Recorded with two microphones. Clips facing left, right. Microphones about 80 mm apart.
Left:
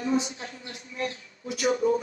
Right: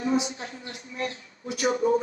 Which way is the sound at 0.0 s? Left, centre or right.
Centre.